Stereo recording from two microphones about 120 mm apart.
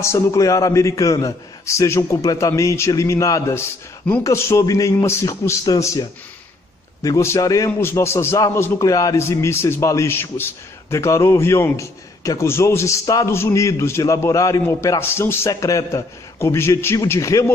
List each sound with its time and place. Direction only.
0.0 s a man's voice: 25° left (ahead or behind)